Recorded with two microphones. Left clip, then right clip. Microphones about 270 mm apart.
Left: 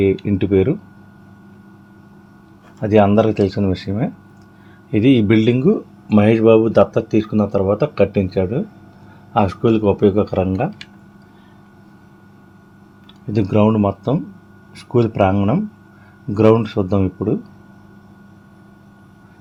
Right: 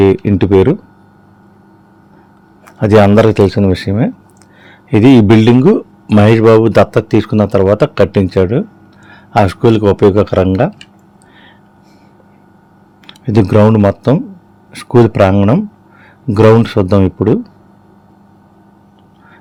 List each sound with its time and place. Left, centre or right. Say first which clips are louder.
0.0 s speech: right 7 dB; right
2.8 s a man's voice: right 6 dB; right
13.1 s a man's voice: right 9 dB; right